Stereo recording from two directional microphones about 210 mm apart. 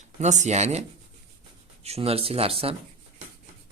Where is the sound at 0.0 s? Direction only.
35° right (ahead or behind).